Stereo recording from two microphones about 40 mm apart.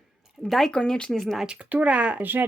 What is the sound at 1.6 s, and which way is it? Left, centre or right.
Speech, right.